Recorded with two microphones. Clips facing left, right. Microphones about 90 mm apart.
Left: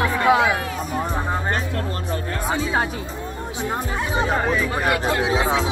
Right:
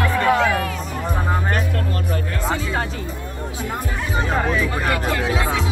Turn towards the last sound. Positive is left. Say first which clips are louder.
# left 2 dB
turn(degrees=25)  # may be behind; listen again after turning